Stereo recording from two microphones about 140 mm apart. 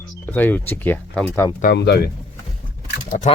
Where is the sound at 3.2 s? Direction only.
55° left (ahead or behind).